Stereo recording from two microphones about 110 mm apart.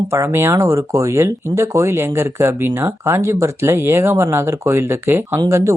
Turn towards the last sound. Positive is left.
turn(degrees=-25)  # may be behind; listen again after turning